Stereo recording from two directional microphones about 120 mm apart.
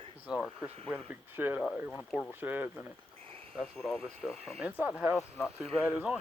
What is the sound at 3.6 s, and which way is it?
Speech, 5° left (ahead or behind).